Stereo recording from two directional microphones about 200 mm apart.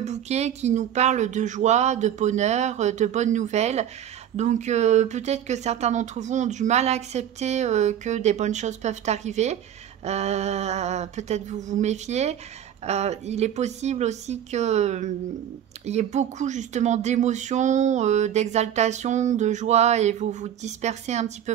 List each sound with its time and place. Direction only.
0.0 s speech: 35° right (ahead or behind)